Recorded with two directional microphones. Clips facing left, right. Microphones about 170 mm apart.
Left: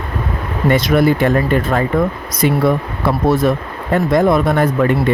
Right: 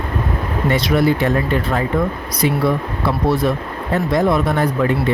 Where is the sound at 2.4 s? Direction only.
50° left (ahead or behind).